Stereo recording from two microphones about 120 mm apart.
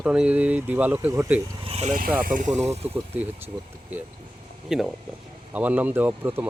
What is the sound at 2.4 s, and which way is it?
Speech, 75° right (ahead or behind).